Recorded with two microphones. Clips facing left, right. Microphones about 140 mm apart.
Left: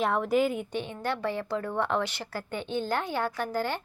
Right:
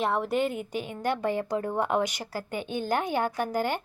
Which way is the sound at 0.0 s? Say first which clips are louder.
Left 1 dB; centre (ahead or behind).